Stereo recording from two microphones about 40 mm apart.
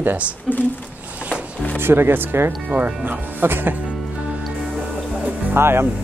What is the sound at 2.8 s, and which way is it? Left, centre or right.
Speech, right.